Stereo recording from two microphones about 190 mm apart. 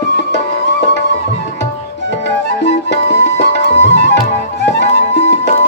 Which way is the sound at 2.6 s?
65° left (ahead or behind).